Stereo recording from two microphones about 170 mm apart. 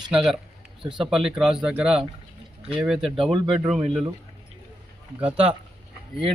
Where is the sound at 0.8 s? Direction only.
30° right (ahead or behind).